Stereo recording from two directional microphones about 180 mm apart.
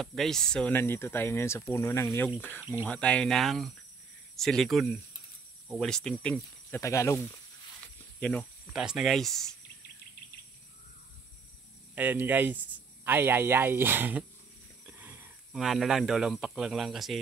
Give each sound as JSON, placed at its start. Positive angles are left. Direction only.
{"t": 0.0, "sound": "speech", "side_deg": 0}
{"t": 6.8, "sound": "speech", "side_deg": 15}
{"t": 8.2, "sound": "speech", "side_deg": 5}
{"t": 11.9, "sound": "speech", "side_deg": -10}